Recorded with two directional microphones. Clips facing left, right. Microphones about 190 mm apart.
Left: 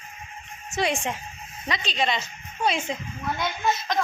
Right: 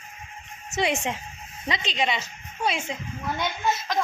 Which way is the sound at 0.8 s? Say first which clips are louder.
Even; 20° right (ahead or behind).